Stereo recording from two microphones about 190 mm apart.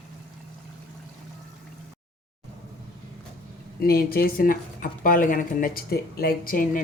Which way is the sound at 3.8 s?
50° left (ahead or behind).